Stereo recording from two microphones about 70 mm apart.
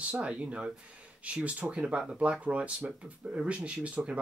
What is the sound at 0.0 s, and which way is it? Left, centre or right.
Speech, centre.